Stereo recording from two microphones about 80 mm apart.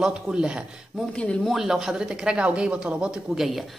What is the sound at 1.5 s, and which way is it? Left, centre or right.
Speech, centre.